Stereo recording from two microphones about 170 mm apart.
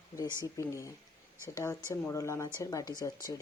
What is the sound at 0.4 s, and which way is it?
Speech, 15° left (ahead or behind).